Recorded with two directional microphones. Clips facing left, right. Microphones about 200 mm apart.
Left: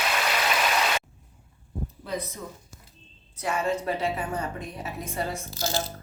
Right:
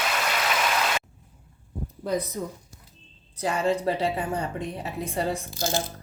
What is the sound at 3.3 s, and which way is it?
A woman's voice, 35° right (ahead or behind).